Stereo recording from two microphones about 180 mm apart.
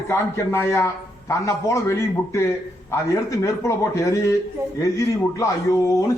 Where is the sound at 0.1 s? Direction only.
15° left (ahead or behind).